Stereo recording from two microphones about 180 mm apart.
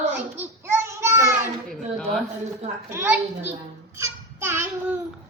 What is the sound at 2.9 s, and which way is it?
Speech, 10° right (ahead or behind).